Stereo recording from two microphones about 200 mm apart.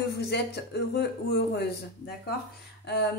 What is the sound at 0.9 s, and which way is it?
Speech, 55° left (ahead or behind).